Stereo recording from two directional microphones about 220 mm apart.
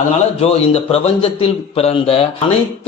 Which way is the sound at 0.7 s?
25° left (ahead or behind).